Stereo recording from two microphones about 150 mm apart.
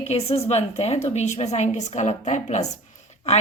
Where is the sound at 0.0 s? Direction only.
45° left (ahead or behind).